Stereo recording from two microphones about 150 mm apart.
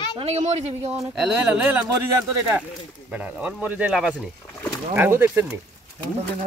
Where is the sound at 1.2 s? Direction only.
5° right (ahead or behind).